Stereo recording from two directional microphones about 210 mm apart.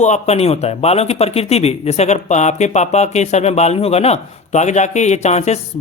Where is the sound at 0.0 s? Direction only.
30° left (ahead or behind).